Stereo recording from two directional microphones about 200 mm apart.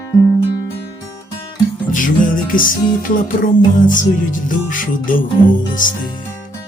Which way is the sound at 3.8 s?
40° left (ahead or behind).